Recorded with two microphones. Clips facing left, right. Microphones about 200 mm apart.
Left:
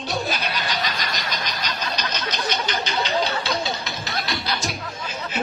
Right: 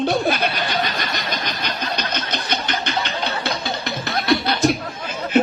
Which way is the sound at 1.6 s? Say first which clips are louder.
Right 3 dB; 55° right (ahead or behind).